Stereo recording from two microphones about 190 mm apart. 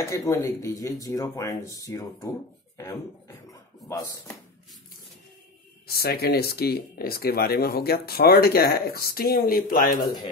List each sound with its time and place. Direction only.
0.0 s speech: 15° left (ahead or behind)
5.9 s speech: 55° left (ahead or behind)